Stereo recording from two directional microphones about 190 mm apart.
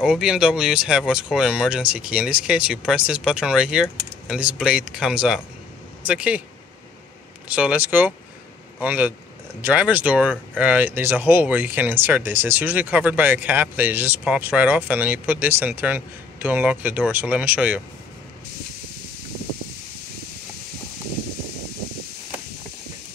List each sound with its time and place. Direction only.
0.0 s speech: 5° right (ahead or behind)
7.4 s a man's voice: 5° right (ahead or behind)